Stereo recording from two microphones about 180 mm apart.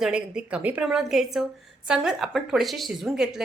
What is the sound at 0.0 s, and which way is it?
A woman's voice, 5° right (ahead or behind).